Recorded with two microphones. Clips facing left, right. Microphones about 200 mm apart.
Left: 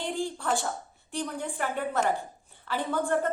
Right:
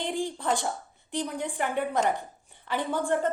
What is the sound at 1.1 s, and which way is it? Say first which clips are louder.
A woman's voice: right 2 dB; 15° right (ahead or behind).